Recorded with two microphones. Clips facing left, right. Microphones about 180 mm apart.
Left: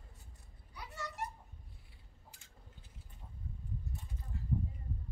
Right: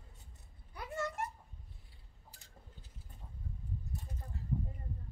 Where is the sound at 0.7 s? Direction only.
50° right (ahead or behind).